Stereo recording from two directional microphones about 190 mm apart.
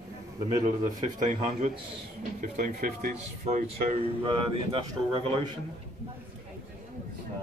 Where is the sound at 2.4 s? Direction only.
45° right (ahead or behind).